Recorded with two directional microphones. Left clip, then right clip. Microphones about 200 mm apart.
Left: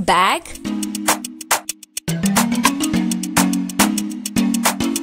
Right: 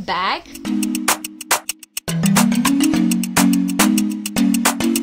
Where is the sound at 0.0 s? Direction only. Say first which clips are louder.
Left 5 dB; 35° left (ahead or behind).